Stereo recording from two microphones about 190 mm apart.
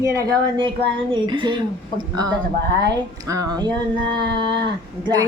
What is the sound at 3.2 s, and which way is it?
A woman's voice, 20° right (ahead or behind).